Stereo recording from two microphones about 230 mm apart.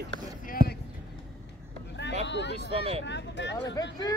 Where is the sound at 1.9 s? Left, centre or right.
Left.